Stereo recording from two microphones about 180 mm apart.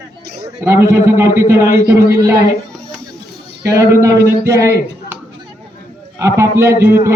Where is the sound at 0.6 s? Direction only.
15° right (ahead or behind).